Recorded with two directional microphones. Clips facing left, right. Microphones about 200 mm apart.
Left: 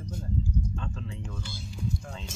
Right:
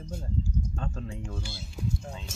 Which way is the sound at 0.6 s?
45° right (ahead or behind).